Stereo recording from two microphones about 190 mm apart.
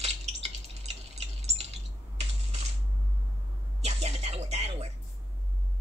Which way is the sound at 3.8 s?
35° right (ahead or behind).